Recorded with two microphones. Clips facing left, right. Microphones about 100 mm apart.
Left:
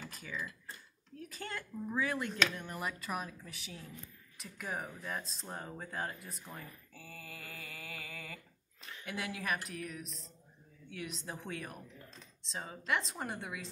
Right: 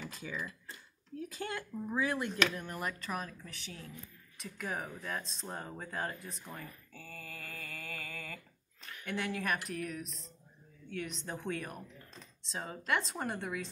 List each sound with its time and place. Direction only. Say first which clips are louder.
0.1 s tick-tock: right 2 dB; 20° right (ahead or behind)
1.3 s speech: right 2 dB; 15° right (ahead or behind); by 13.7 s centre (ahead or behind)